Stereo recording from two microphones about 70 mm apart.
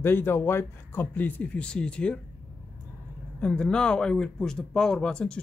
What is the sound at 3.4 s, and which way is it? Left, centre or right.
Speech, centre.